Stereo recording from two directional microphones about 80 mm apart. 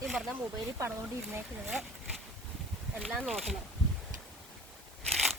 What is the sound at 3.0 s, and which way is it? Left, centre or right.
Speech, centre.